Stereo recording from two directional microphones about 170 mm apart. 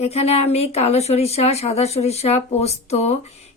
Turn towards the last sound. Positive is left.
turn(degrees=40)  # may be behind; listen again after turning